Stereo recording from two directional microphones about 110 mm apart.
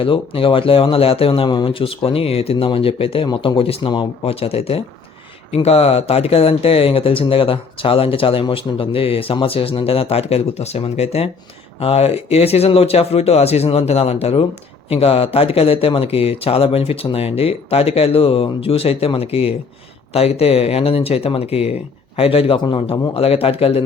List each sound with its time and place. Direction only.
0.0 s speech: 55° left (ahead or behind)
3.2 s speech: 40° left (ahead or behind)
3.6 s speech: 55° left (ahead or behind)